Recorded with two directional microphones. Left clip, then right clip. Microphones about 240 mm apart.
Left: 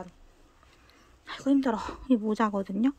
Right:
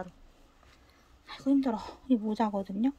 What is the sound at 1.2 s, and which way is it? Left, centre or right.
Speech, centre.